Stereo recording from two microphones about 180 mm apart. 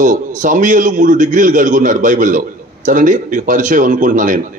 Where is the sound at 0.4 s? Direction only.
45° right (ahead or behind).